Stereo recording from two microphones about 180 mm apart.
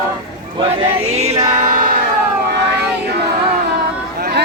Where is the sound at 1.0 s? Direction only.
35° right (ahead or behind).